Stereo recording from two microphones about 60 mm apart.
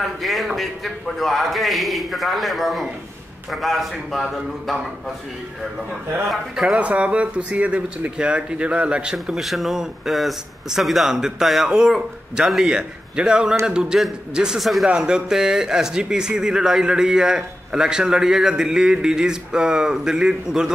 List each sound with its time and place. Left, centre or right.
0.0 s a man's voice: centre
6.2 s speech: centre
6.8 s speech: right
9.1 s a man's voice: centre
14.6 s a man's voice: centre
14.9 s speech: centre